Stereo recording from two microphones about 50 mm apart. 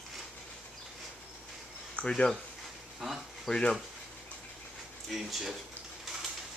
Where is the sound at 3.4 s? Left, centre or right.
Centre.